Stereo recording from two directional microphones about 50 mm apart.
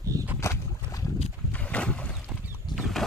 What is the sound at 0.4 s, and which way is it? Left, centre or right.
Boat, left.